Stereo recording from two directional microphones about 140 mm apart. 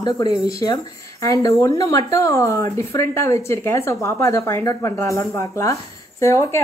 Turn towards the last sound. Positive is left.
turn(degrees=20)  # may be behind; listen again after turning